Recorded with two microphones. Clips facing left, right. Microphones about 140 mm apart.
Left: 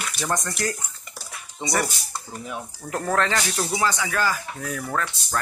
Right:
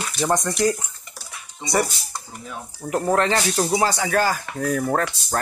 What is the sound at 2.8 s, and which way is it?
Speech, 20° right (ahead or behind).